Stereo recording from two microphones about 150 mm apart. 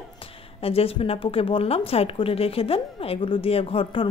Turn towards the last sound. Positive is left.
turn(degrees=40)  # may be behind; listen again after turning